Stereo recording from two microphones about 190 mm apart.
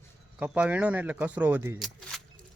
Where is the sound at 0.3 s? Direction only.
10° right (ahead or behind).